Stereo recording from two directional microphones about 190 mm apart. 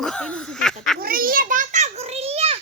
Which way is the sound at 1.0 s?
50° right (ahead or behind).